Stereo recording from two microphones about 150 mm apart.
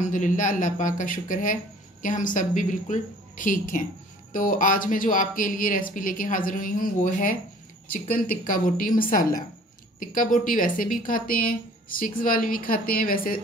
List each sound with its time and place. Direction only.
0.0 s speech: 60° left (ahead or behind)
8.5 s speech: 65° left (ahead or behind)